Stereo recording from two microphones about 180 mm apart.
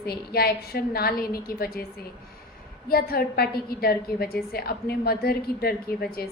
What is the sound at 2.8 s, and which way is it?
A woman's voice, 55° left (ahead or behind).